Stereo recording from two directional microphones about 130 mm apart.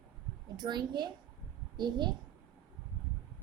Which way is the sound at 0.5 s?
35° right (ahead or behind).